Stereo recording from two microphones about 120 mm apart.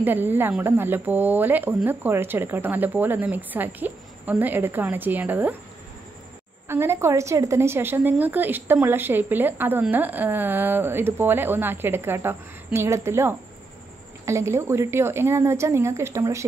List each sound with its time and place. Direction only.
0.0 s a woman's voice: 15° right (ahead or behind)
6.7 s a woman's voice: 20° right (ahead or behind)